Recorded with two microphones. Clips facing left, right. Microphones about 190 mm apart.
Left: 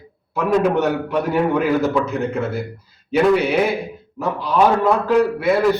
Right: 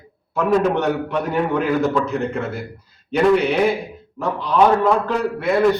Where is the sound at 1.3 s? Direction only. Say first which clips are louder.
Left 2 dB; 5° left (ahead or behind).